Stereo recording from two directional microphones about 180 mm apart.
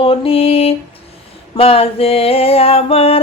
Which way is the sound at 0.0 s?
30° left (ahead or behind).